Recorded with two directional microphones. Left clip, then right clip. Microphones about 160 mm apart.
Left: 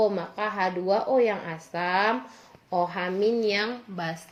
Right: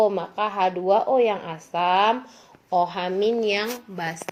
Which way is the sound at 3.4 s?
25° right (ahead or behind).